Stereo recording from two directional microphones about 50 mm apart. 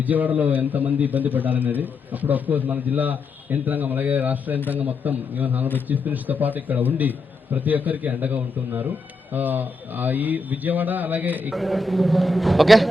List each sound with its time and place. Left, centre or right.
0.0 s a man's voice: right
11.5 s a man's voice: centre